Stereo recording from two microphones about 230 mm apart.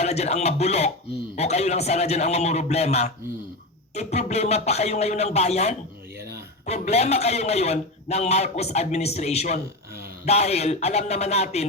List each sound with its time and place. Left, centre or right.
0.0 s a man's voice: left